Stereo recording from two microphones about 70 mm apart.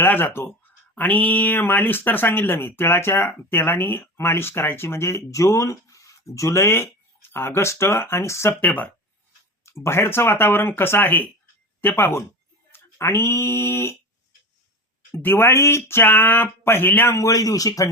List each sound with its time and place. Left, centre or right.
0.0 s speech: left
8.6 s speech: left
9.6 s speech: left
15.1 s speech: left
17.2 s speech: left